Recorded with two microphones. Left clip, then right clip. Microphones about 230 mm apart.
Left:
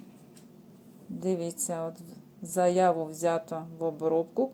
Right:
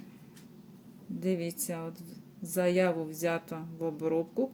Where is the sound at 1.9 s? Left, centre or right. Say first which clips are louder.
Left 1 dB; centre.